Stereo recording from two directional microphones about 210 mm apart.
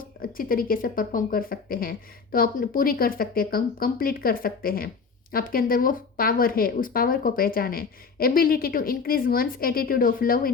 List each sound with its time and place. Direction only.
0.0 s a woman's voice: 45° left (ahead or behind)